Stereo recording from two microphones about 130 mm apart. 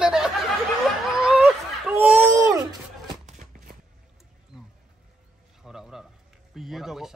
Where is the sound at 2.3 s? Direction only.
25° right (ahead or behind).